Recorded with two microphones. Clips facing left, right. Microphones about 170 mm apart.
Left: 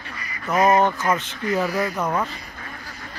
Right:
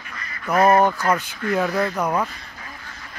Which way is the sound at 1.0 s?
20° left (ahead or behind).